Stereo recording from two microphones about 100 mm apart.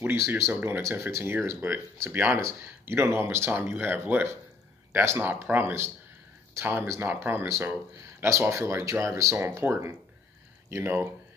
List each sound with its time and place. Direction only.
0.0 s speech: 20° right (ahead or behind)